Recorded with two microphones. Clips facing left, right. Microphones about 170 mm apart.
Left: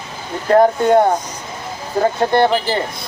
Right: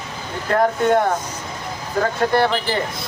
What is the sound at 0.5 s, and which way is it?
Speech, 30° left (ahead or behind).